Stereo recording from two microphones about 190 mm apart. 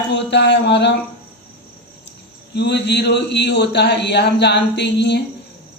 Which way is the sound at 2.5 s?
65° left (ahead or behind).